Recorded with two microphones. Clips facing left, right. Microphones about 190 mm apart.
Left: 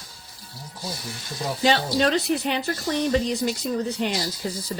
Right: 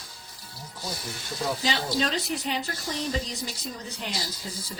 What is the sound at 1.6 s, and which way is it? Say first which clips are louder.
Speech: left 10 dB; 65° left (ahead or behind).